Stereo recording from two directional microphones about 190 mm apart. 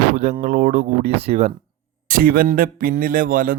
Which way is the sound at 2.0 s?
50° right (ahead or behind).